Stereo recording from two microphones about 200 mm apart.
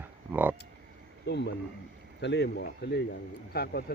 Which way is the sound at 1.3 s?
55° left (ahead or behind).